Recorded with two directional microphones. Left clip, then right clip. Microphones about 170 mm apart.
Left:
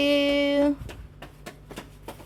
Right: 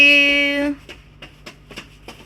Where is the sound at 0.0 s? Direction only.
20° left (ahead or behind).